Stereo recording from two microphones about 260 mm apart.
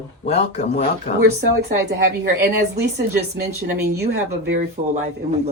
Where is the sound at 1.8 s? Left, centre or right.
Right.